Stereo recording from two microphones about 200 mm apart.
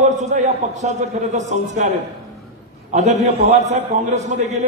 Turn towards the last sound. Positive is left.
turn(degrees=-35)  # may be behind; listen again after turning